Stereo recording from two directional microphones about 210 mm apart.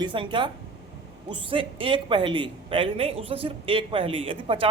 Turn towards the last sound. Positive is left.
turn(degrees=-25)  # may be behind; listen again after turning